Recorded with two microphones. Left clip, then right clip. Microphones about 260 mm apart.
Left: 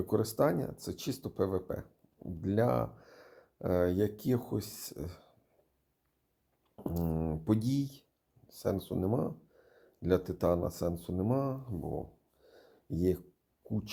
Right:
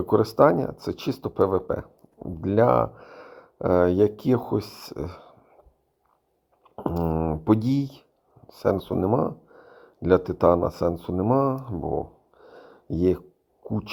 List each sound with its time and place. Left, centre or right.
0.1 s speech: right
6.7 s speech: centre
12.4 s a sound: centre
13.7 s speech: centre